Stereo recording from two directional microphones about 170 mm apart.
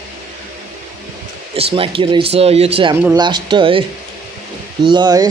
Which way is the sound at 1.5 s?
35° right (ahead or behind).